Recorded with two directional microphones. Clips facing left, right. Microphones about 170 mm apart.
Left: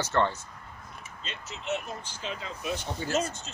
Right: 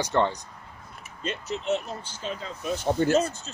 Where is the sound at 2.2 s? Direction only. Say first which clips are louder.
Right 3 dB; 35° right (ahead or behind).